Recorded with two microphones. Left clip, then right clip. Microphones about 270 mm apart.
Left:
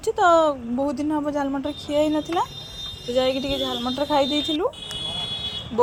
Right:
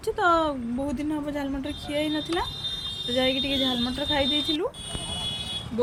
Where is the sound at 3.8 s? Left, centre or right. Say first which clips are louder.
Left 4 dB; left.